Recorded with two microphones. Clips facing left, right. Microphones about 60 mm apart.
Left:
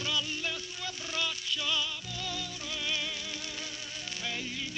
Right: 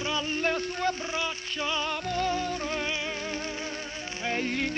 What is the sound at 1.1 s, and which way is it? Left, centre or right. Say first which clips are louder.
Music: right 3 dB; right.